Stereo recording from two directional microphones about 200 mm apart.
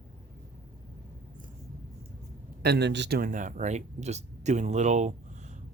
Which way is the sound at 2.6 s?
55° right (ahead or behind).